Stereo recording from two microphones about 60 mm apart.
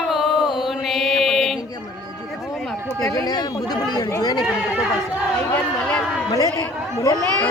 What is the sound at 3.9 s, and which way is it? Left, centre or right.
Speech, left.